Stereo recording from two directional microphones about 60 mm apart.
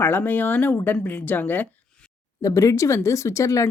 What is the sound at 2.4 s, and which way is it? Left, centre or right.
Speech, left.